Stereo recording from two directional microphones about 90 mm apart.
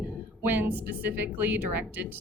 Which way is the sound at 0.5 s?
20° right (ahead or behind).